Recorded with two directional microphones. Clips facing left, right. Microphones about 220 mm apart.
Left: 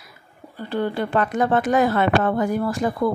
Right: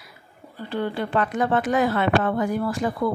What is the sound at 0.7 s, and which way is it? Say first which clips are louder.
A woman's voice: left 2 dB; 45° left (ahead or behind).